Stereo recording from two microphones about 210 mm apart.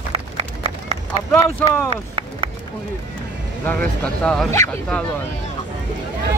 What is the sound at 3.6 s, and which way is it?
Speech, 5° left (ahead or behind).